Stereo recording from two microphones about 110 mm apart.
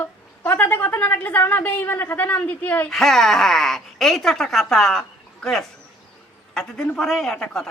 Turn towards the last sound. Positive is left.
turn(degrees=5)  # may be behind; listen again after turning